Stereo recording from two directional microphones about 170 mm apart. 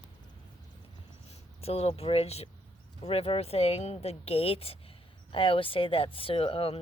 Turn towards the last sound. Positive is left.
turn(degrees=35)  # may be behind; listen again after turning